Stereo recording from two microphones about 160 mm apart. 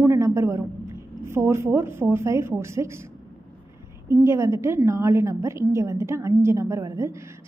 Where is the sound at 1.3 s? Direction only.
15° right (ahead or behind).